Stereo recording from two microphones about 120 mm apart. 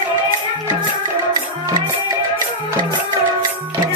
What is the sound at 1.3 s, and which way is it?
Music, 30° right (ahead or behind).